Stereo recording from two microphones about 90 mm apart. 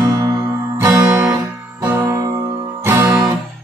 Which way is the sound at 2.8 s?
30° right (ahead or behind).